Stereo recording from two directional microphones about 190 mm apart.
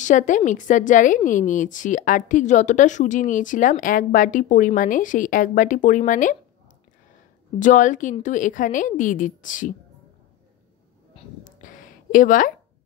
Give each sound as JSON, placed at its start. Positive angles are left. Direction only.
{"t": 0.0, "sound": "a woman's voice", "side_deg": 40}
{"t": 7.5, "sound": "a woman's voice", "side_deg": 40}
{"t": 11.6, "sound": "a sound", "side_deg": 45}